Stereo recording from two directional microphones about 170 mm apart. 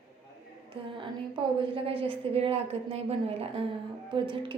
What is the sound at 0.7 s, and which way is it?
A woman's voice, 35° right (ahead or behind).